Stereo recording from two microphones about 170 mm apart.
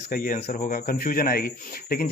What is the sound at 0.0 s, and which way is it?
Speech, 55° left (ahead or behind).